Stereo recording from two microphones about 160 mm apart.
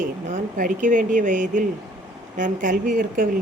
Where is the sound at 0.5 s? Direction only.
60° right (ahead or behind).